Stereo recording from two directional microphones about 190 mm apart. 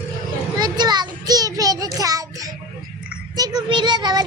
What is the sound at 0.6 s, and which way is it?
Child singing, 20° right (ahead or behind).